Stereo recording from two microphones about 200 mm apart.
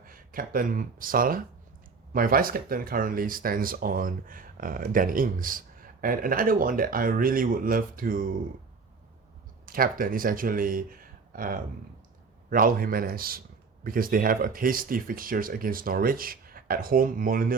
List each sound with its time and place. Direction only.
0.0 s speech: 45° right (ahead or behind)
9.6 s speech: 45° right (ahead or behind)